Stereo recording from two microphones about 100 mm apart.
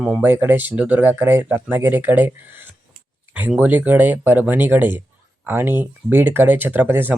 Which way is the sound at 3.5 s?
15° right (ahead or behind).